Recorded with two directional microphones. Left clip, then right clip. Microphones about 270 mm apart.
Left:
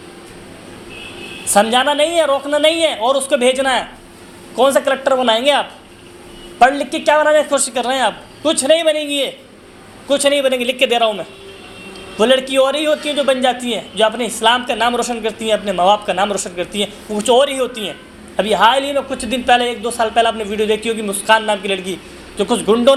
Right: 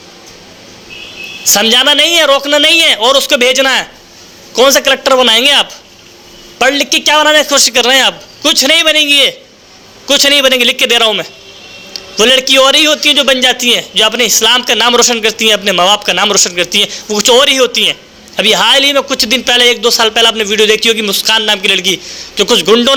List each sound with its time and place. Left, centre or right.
1.5 s a man's voice: right